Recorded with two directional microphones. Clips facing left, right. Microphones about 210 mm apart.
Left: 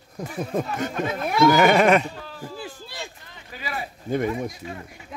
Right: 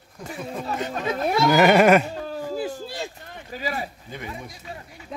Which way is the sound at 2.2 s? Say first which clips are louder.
Right 8 dB; 40° right (ahead or behind).